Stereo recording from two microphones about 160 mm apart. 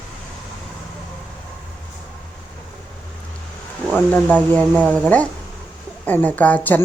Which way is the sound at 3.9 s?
10° left (ahead or behind).